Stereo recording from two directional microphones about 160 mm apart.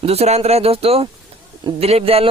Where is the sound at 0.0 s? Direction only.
40° right (ahead or behind).